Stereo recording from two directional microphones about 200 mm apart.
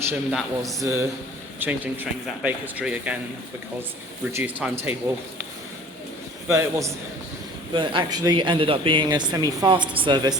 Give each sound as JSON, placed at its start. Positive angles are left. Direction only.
{"t": 0.1, "sound": "a man's voice", "side_deg": -5}
{"t": 0.8, "sound": "speech", "side_deg": -15}
{"t": 4.3, "sound": "speech", "side_deg": -10}
{"t": 6.5, "sound": "speech", "side_deg": -15}